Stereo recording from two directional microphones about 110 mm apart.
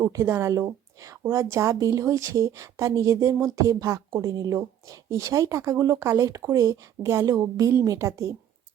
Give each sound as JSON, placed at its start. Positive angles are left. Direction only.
{"t": 0.0, "sound": "a woman's voice", "side_deg": -25}